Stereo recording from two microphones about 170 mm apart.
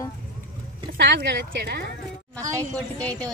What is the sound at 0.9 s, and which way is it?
Speech, 75° right (ahead or behind).